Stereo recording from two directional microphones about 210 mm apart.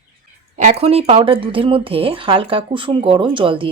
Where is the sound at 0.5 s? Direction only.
35° right (ahead or behind).